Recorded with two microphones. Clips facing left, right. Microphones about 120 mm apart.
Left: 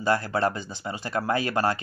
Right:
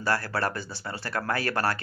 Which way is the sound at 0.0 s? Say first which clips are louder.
Left 4 dB; 20° left (ahead or behind).